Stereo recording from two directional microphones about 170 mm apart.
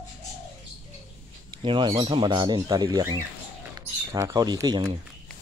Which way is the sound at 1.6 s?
30° right (ahead or behind).